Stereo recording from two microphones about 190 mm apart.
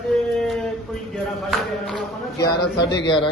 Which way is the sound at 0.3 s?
Centre (ahead or behind).